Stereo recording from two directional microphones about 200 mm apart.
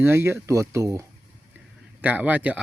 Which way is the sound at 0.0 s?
10° right (ahead or behind).